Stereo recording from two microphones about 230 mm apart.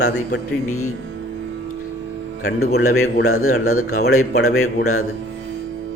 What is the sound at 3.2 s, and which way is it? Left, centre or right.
Speech, left.